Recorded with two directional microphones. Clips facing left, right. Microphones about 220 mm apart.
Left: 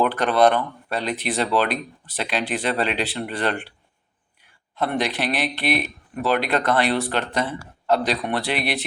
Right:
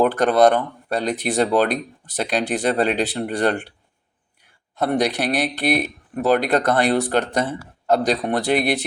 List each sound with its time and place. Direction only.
0.0 s speech: 45° right (ahead or behind)
4.9 s speech: 40° right (ahead or behind)